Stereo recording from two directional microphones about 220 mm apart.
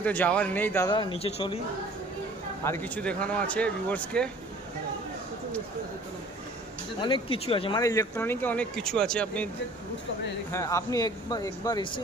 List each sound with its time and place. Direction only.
0.0 s speech: 5° left (ahead or behind); by 1.6 s 25° left (ahead or behind)
2.6 s speech: 10° left (ahead or behind)
7.0 s speech: 25° left (ahead or behind); by 9.5 s 5° left (ahead or behind)
10.5 s speech: 15° left (ahead or behind)